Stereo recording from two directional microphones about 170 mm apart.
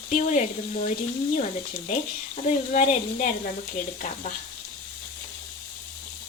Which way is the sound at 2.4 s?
45° left (ahead or behind).